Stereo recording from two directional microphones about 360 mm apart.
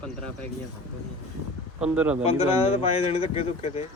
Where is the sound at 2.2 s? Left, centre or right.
Centre.